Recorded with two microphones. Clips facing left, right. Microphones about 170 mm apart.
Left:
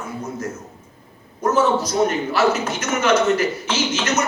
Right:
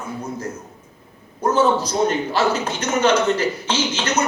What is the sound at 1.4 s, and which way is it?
A man's voice, 30° right (ahead or behind).